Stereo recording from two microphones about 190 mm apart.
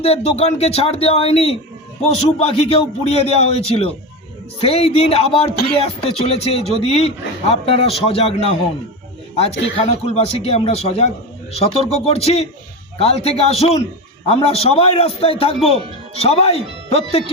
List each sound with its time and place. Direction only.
0.0 s speech: 30° left (ahead or behind)